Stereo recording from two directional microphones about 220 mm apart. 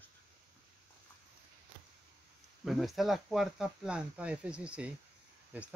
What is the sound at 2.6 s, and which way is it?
Speech, centre (ahead or behind).